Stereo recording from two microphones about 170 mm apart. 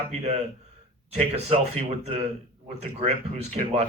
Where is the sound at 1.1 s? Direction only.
35° right (ahead or behind).